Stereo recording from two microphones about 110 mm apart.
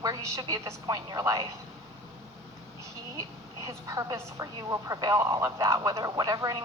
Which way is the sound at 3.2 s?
30° right (ahead or behind).